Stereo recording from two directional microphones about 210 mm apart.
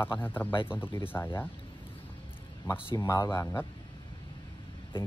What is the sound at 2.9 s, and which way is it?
Speech, 15° left (ahead or behind).